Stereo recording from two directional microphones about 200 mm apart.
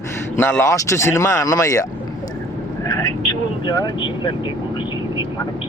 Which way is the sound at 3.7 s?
20° left (ahead or behind).